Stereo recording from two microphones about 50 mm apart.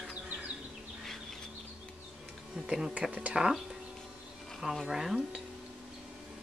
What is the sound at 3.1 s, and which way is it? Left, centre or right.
Speech, right.